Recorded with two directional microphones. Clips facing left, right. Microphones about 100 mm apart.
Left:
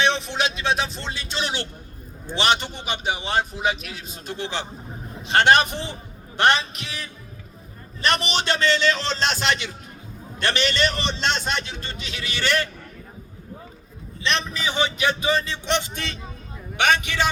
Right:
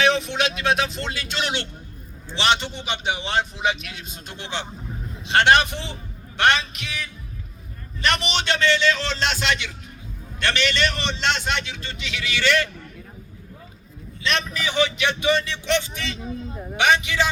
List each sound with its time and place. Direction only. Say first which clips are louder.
0.1 s speech: right 2 dB; centre (ahead or behind)
1.4 s a man's voice: right 1 dB; 35° left (ahead or behind)
2.3 s a man's voice: even; 45° left (ahead or behind)
14.3 s a man's voice: right 4 dB; 30° left (ahead or behind)
16.0 s a man's voice: right 3 dB; 50° left (ahead or behind)